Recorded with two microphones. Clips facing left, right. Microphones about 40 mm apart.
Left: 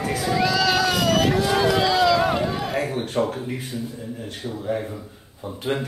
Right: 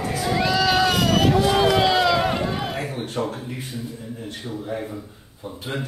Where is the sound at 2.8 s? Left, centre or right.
Left.